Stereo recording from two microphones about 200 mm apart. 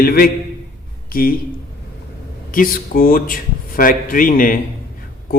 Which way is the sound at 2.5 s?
45° left (ahead or behind).